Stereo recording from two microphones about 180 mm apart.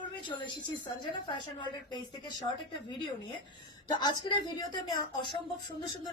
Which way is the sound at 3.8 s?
25° left (ahead or behind).